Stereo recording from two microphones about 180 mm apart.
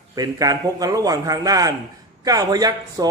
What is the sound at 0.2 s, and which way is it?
A man's voice, 20° right (ahead or behind).